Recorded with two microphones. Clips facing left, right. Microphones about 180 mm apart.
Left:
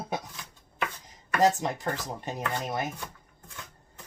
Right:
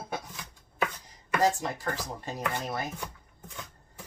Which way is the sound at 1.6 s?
20° left (ahead or behind).